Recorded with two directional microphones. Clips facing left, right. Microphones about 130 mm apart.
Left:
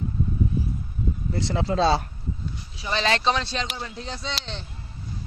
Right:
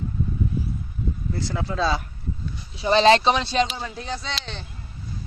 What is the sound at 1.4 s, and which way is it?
Speech, 25° left (ahead or behind).